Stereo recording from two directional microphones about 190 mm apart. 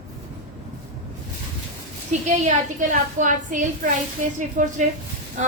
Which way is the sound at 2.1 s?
40° right (ahead or behind).